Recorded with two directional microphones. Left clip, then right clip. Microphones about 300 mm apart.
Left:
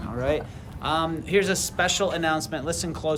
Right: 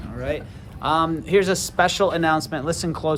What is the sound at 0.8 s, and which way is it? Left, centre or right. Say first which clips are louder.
A man's voice: right 5 dB; centre.